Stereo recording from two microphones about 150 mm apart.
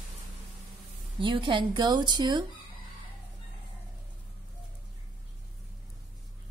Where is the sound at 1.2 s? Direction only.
35° right (ahead or behind).